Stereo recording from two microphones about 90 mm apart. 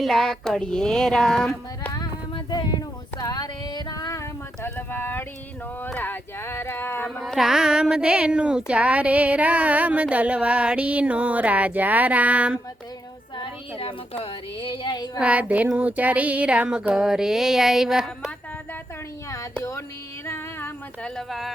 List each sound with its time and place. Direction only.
0.0 s music: 5° left (ahead or behind)
2.5 s a sound: 50° left (ahead or behind)
4.6 s a sound: 20° left (ahead or behind)
7.2 s speech: centre (ahead or behind)
13.3 s speech: 75° left (ahead or behind); by 15.2 s 50° left (ahead or behind)
15.2 s speech: 15° right (ahead or behind)
20.2 s music: 25° left (ahead or behind)
21.0 s music: centre (ahead or behind)